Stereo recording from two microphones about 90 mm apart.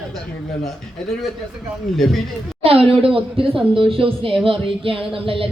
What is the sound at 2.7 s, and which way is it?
A woman's voice, 90° right.